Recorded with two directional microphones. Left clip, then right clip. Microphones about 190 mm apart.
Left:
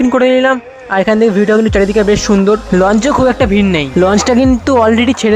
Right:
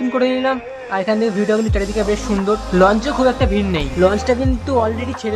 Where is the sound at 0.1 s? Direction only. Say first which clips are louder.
Left 6 dB; 35° left (ahead or behind).